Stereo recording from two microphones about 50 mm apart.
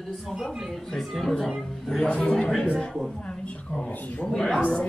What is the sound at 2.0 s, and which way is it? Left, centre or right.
Speech, centre.